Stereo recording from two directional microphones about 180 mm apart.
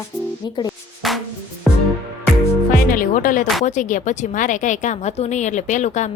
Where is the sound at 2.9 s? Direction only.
50° left (ahead or behind).